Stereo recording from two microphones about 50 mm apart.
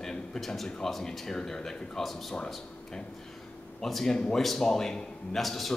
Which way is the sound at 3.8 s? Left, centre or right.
Centre.